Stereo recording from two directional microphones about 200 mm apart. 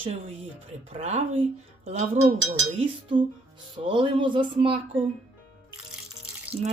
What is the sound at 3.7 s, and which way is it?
Speech, 25° right (ahead or behind).